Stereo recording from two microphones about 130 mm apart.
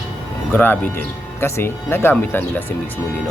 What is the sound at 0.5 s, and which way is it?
Speech, 15° left (ahead or behind).